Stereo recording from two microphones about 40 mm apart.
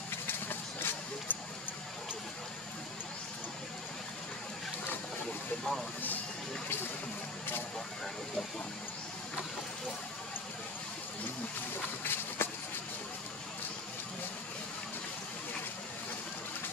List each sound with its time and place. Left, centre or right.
0.1 s vehicle: left
5.6 s vehicle: centre
12.0 s run: left